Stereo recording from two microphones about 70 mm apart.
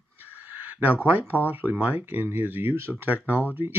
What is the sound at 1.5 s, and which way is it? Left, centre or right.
Speech, right.